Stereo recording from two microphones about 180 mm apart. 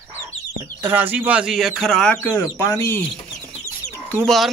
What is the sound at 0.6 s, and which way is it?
Speech, 10° right (ahead or behind).